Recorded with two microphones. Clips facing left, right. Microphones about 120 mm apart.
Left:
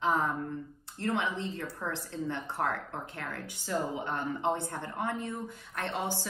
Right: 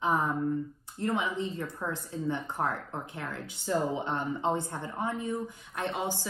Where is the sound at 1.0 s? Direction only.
15° right (ahead or behind).